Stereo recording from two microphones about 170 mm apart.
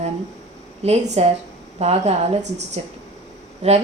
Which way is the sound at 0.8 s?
40° right (ahead or behind).